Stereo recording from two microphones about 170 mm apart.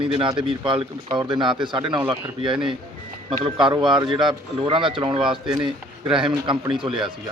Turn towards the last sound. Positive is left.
turn(degrees=-5)  # may be behind; listen again after turning